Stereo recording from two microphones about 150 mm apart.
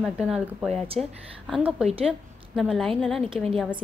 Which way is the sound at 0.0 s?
5° right (ahead or behind).